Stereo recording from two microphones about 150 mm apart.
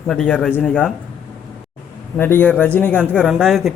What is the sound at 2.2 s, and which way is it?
A man's voice, 15° left (ahead or behind).